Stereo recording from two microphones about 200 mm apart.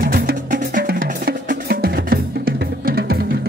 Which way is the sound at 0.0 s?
45° right (ahead or behind).